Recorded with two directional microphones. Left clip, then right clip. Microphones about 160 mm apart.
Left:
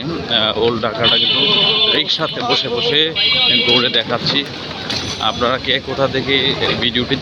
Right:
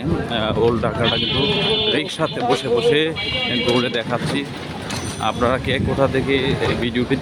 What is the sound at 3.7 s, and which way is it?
Speech, 15° right (ahead or behind).